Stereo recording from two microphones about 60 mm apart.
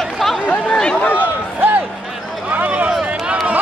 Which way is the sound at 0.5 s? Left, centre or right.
Centre.